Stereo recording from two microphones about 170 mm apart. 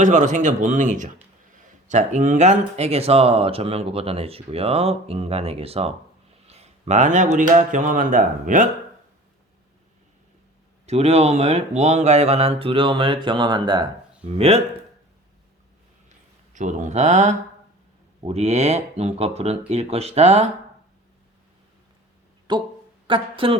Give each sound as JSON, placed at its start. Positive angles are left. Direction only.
{"t": 0.0, "sound": "speech", "side_deg": -45}
{"t": 10.8, "sound": "speech", "side_deg": -40}
{"t": 14.3, "sound": "speech", "side_deg": -35}
{"t": 16.0, "sound": "a sound", "side_deg": -45}
{"t": 18.2, "sound": "speech", "side_deg": -40}
{"t": 22.5, "sound": "speech", "side_deg": -25}